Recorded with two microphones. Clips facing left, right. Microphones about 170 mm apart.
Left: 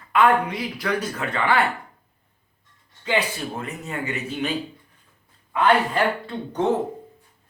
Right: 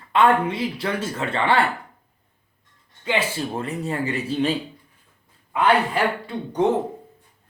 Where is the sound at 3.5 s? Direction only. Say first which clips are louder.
Right 4 dB; 35° right (ahead or behind).